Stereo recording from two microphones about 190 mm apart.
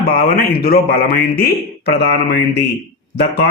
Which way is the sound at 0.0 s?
50° left (ahead or behind).